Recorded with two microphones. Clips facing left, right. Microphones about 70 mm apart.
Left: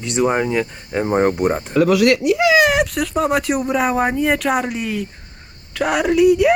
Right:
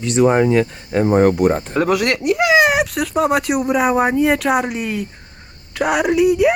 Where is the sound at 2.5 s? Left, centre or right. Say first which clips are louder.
Right 2 dB; right.